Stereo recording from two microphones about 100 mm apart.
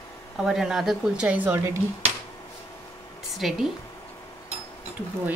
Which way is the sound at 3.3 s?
Centre (ahead or behind).